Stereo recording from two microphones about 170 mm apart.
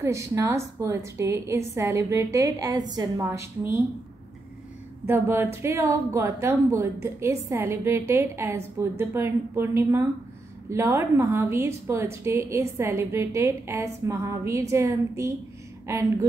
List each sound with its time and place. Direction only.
0.0 s a woman's voice: 15° right (ahead or behind)
5.0 s a woman's voice: 15° right (ahead or behind)